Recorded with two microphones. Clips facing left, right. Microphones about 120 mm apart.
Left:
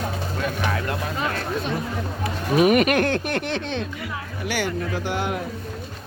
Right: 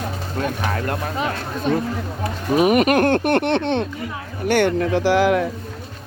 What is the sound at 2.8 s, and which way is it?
Speech, 45° right (ahead or behind).